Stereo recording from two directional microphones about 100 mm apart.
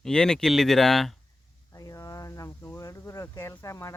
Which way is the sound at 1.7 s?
35° left (ahead or behind).